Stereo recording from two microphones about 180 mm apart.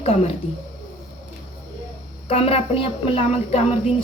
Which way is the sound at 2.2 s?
35° left (ahead or behind).